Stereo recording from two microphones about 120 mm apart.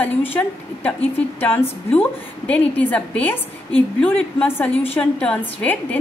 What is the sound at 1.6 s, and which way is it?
Speech, 50° left (ahead or behind).